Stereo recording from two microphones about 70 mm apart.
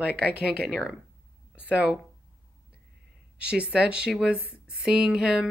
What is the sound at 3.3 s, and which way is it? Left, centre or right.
Speech, centre.